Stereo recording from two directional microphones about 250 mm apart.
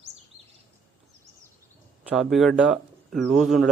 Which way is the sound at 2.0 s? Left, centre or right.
Centre.